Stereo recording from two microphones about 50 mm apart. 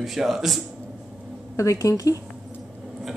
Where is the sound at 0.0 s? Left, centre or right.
Centre.